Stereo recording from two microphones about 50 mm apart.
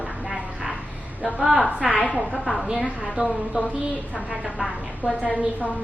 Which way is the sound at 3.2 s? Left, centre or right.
Right.